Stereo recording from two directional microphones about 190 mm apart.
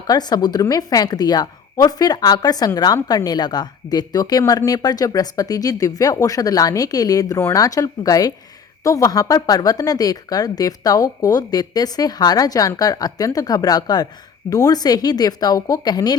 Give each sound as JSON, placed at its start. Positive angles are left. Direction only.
{"t": 0.1, "sound": "a woman's voice", "side_deg": 20}